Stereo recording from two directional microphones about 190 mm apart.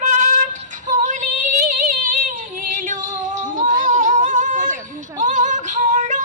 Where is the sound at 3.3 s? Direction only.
45° right (ahead or behind).